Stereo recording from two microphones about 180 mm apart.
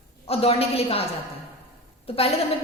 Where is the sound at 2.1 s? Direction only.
30° left (ahead or behind).